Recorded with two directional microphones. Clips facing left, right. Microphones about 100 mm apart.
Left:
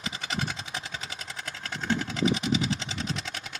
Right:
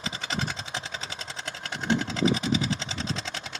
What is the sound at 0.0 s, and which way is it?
Vehicle, 30° right (ahead or behind).